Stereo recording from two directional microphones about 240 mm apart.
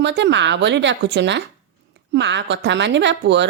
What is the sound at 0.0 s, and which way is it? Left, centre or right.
A woman's voice, right.